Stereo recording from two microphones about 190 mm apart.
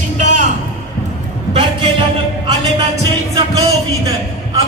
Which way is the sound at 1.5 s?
30° right (ahead or behind).